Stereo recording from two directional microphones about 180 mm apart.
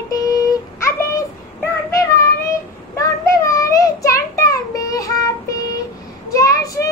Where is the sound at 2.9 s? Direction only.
15° left (ahead or behind).